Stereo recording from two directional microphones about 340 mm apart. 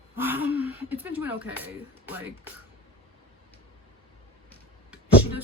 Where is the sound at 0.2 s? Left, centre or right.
Centre.